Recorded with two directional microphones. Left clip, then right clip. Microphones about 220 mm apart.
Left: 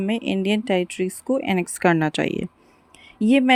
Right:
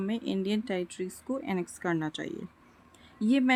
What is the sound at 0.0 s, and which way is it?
A woman's voice, 25° left (ahead or behind).